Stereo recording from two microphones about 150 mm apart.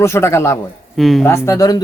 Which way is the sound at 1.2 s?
20° left (ahead or behind).